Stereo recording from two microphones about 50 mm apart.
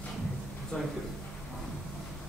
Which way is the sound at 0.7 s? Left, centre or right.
Left.